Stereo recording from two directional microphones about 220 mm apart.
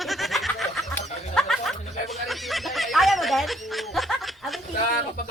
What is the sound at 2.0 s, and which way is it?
Snicker, centre (ahead or behind).